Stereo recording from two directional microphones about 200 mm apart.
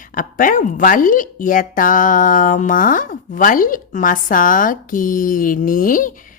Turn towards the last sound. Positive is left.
turn(degrees=40)  # may be behind; listen again after turning